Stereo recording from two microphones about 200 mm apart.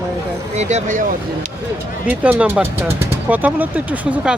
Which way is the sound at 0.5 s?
35° right (ahead or behind).